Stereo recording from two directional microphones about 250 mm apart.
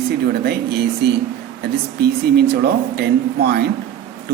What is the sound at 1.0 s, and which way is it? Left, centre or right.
Speech, right.